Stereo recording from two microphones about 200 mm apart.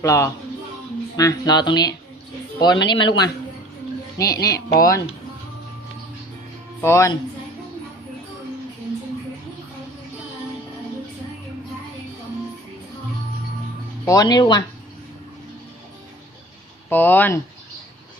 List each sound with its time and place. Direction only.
0.0 s speech: 15° left (ahead or behind)
4.2 s speech: 15° left (ahead or behind)
6.8 s speech: 15° left (ahead or behind)
14.0 s speech: 20° left (ahead or behind)
16.9 s speech: 10° left (ahead or behind)